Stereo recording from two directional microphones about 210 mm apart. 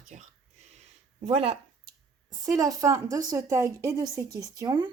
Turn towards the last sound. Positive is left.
turn(degrees=-20)  # may be behind; listen again after turning